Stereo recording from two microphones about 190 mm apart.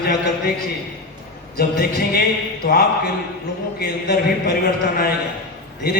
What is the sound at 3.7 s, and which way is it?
Speech, 55° left (ahead or behind).